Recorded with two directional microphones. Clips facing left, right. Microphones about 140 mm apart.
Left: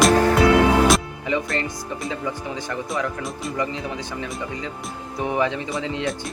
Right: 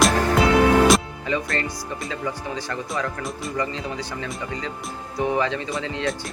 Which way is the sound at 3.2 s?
Centre (ahead or behind).